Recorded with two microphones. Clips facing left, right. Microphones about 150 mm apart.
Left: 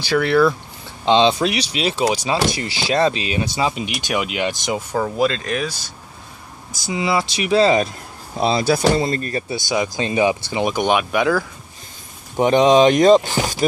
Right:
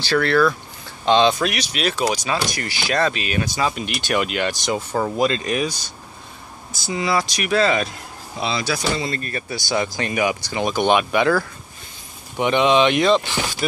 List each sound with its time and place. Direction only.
0.0 s speech: 15° left (ahead or behind)
4.9 s speech: centre (ahead or behind)
6.7 s speech: 15° left (ahead or behind); by 7.9 s 30° left (ahead or behind)
8.4 s speech: 45° left (ahead or behind)
9.2 s speech: 35° left (ahead or behind)
9.6 s speech: 20° left (ahead or behind)
12.4 s speech: 40° left (ahead or behind)